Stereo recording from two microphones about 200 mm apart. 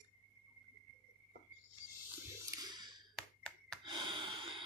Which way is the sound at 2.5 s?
20° right (ahead or behind).